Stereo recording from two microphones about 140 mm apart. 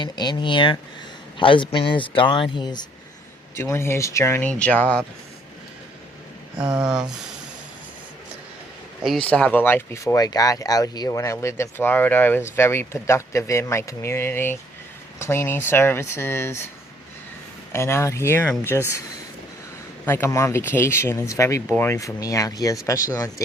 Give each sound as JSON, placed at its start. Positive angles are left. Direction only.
{"t": 0.0, "sound": "a man's voice", "side_deg": 30}
{"t": 3.5, "sound": "speech", "side_deg": 20}
{"t": 9.2, "sound": "speech", "side_deg": 10}
{"t": 17.7, "sound": "speech", "side_deg": 20}
{"t": 20.1, "sound": "speech", "side_deg": 20}